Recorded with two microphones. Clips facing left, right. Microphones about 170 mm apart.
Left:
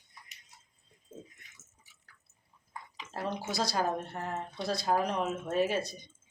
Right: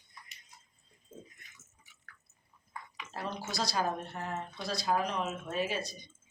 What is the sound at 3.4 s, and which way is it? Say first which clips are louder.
Speech: left 1 dB; 55° left (ahead or behind).